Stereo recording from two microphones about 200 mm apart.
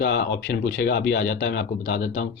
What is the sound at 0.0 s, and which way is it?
Speech, 55° left (ahead or behind).